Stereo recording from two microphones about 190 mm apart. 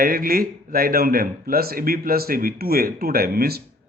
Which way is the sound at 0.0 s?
50° right (ahead or behind).